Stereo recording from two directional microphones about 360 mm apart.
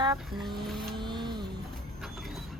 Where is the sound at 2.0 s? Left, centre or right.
Centre.